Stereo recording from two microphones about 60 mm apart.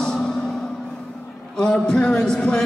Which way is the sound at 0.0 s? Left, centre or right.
Centre.